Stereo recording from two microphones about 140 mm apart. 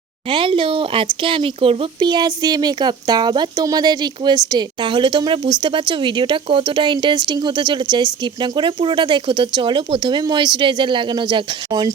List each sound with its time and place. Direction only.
0.3 s speech: 35° right (ahead or behind)